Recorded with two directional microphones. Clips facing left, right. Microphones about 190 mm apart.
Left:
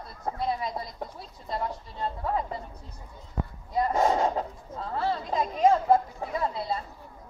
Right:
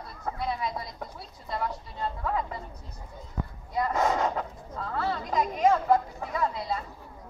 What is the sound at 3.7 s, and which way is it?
Speech, 30° left (ahead or behind).